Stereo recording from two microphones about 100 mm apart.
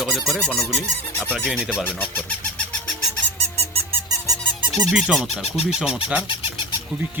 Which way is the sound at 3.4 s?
90° right.